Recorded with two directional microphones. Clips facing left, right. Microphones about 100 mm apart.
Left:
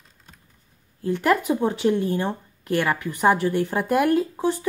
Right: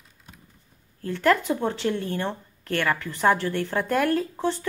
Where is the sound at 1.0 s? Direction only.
15° left (ahead or behind).